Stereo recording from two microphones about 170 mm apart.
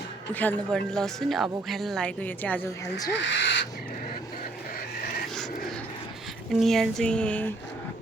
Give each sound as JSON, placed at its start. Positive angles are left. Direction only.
{"t": 0.3, "sound": "speech", "side_deg": 5}
{"t": 3.1, "sound": "speech", "side_deg": 90}
{"t": 6.5, "sound": "speech", "side_deg": 0}